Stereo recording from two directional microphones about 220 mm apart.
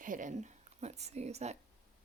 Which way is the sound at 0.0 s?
35° right (ahead or behind).